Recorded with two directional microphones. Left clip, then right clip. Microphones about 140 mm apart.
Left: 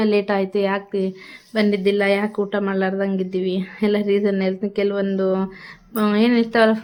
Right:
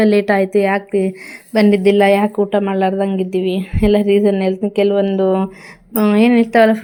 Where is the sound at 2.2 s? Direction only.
20° right (ahead or behind).